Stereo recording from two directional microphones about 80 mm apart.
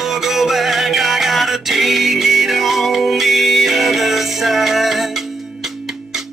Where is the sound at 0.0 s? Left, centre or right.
Centre.